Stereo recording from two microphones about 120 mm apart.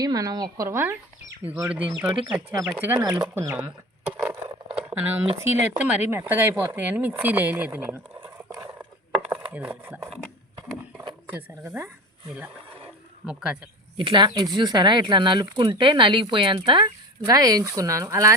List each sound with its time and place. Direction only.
0.0 s speech: 30° right (ahead or behind)
0.7 s speech: 20° right (ahead or behind)
4.9 s speech: 15° right (ahead or behind)
9.5 s speech: 15° right (ahead or behind)
11.3 s speech: 15° right (ahead or behind)
13.2 s speech: 10° right (ahead or behind)
13.9 s speech: 45° right (ahead or behind); by 18.3 s 25° right (ahead or behind)